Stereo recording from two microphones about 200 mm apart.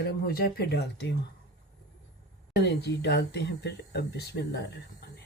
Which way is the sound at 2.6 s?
55° left (ahead or behind).